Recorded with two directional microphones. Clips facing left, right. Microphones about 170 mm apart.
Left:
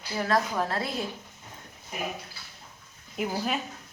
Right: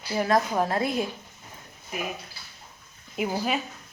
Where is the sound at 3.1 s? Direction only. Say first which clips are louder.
Right 2 dB; 5° right (ahead or behind).